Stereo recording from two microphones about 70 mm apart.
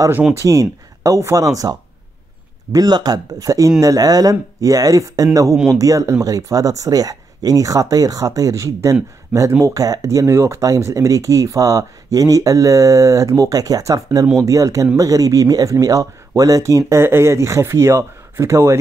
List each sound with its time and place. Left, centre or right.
0.3 s speech: right
2.7 s speech: right
3.3 s speech: right
17.0 s speech: right